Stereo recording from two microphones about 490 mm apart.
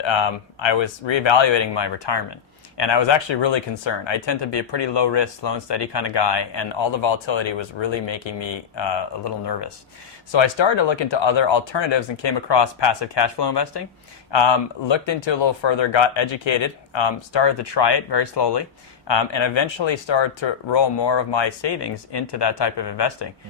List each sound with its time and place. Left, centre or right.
0.0 s speech: left